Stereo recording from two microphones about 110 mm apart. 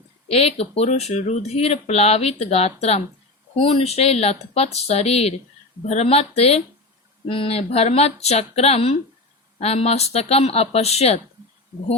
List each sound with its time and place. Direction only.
0.3 s speech: 65° left (ahead or behind)
5.8 s speech: 80° left